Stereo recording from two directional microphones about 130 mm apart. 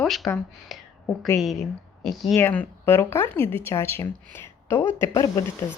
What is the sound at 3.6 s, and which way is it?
Speech, 20° left (ahead or behind).